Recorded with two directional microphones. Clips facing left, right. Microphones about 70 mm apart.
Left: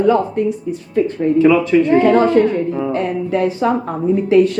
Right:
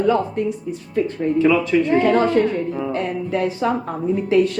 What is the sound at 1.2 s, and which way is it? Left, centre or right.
Music, left.